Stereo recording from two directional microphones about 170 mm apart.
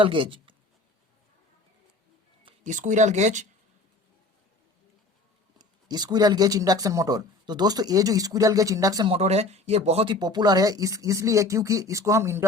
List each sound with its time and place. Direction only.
0.0 s speech: 30° right (ahead or behind)
2.6 s speech: 45° right (ahead or behind)
5.5 s speech: 25° right (ahead or behind)
9.0 s speech: 40° right (ahead or behind); by 12.5 s 15° right (ahead or behind)